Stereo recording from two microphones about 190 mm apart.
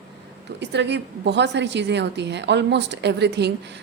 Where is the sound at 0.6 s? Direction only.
65° right (ahead or behind).